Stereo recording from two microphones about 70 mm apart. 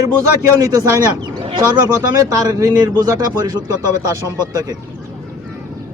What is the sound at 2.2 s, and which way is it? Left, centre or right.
Speech, right.